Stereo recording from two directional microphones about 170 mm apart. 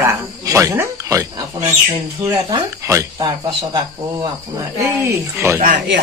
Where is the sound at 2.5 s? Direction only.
20° right (ahead or behind).